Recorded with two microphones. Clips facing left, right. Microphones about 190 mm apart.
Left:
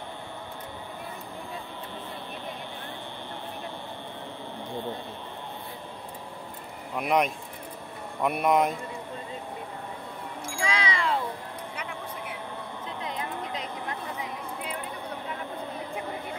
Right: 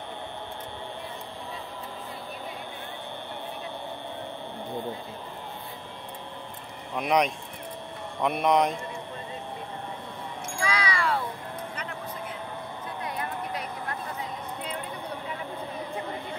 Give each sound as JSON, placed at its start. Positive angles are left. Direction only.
{"t": 7.0, "sound": "speech", "side_deg": 5}
{"t": 10.4, "sound": "music", "side_deg": 25}